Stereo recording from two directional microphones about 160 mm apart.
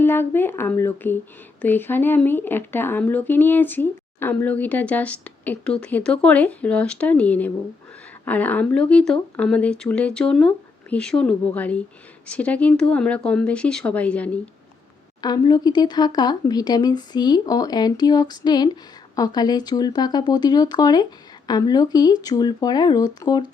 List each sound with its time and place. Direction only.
0.0 s speech: 15° left (ahead or behind)
15.2 s speech: 25° left (ahead or behind)